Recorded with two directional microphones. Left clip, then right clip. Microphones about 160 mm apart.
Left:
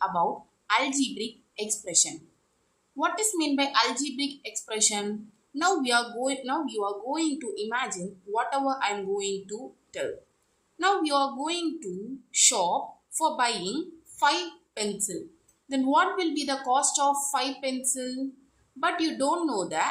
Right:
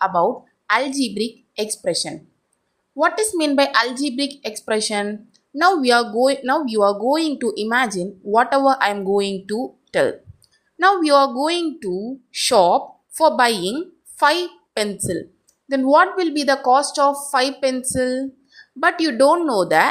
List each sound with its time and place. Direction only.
0.0 s a woman's voice: 40° right (ahead or behind)